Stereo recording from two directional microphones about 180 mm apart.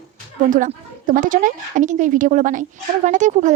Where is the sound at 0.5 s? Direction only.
45° right (ahead or behind).